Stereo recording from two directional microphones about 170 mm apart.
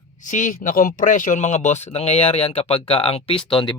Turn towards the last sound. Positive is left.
turn(degrees=30)  # may be behind; listen again after turning